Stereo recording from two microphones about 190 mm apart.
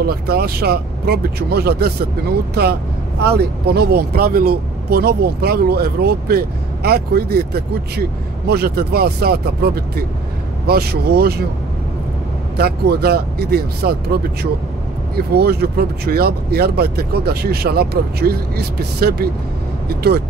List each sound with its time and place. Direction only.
0.0 s speech: 55° right (ahead or behind)
12.5 s speech: 55° right (ahead or behind)